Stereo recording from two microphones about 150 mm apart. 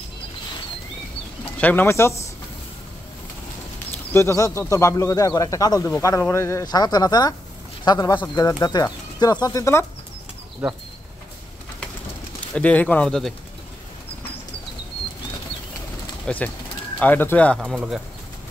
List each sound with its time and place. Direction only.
1.6 s speech: 10° left (ahead or behind)
4.1 s speech: 20° left (ahead or behind)
12.5 s speech: 10° left (ahead or behind)
16.3 s speech: 10° left (ahead or behind)
17.6 s speech: 5° right (ahead or behind)